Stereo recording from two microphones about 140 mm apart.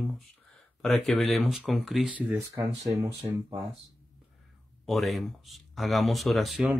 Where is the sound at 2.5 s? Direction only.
25° right (ahead or behind).